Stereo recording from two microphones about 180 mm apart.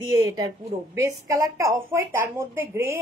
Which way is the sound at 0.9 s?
20° right (ahead or behind).